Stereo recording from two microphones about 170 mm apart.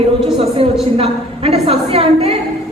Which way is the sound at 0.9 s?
35° right (ahead or behind).